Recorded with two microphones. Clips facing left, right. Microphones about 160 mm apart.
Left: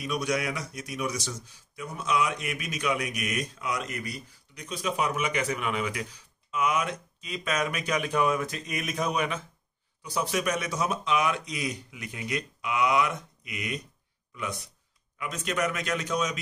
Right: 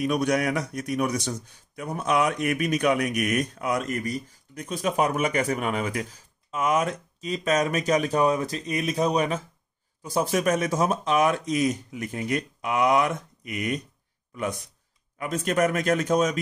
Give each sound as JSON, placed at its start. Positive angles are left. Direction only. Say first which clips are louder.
{"t": 0.0, "sound": "a man's voice", "louder": "right 6 dB", "side_deg": -50}
{"t": 10.0, "sound": "a man's voice", "louder": "right 5 dB", "side_deg": -45}
{"t": 15.1, "sound": "a man's voice", "louder": "right 6 dB", "side_deg": -45}